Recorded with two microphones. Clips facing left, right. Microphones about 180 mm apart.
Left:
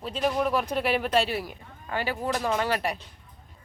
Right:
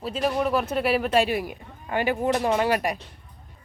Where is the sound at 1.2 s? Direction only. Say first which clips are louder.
Right 4 dB; 15° right (ahead or behind).